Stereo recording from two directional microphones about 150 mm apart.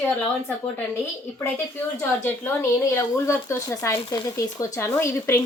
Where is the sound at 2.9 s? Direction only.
15° left (ahead or behind).